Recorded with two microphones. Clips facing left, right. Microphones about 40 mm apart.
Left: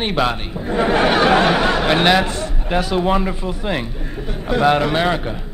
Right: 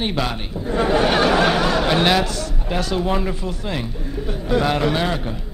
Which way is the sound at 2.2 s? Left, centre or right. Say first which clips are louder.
Left 2 dB; left.